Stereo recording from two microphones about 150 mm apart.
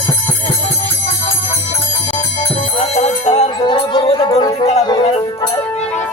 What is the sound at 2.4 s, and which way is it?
Music, 45° left (ahead or behind).